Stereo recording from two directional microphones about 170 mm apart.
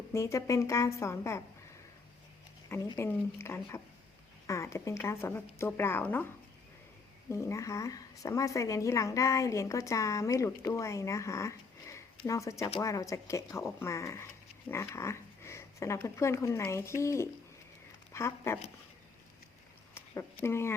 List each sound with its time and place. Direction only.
0.1 s a woman's voice: 15° left (ahead or behind)
2.6 s a woman's voice: 20° left (ahead or behind)
7.3 s a woman's voice: 15° left (ahead or behind)
20.1 s a woman's voice: 15° left (ahead or behind)